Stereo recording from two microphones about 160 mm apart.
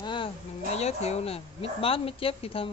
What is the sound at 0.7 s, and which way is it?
Speech, 40° left (ahead or behind).